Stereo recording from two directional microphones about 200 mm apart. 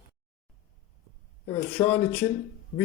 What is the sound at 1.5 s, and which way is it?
Speech, 10° left (ahead or behind).